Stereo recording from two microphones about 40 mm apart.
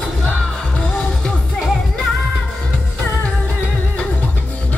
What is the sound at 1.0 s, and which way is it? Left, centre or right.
Music, centre.